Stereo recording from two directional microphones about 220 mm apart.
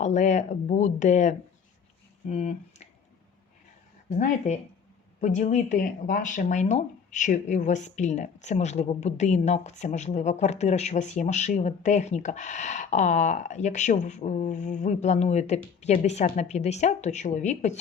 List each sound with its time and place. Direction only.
0.0 s speech: 30° left (ahead or behind)
4.2 s speech: 30° left (ahead or behind)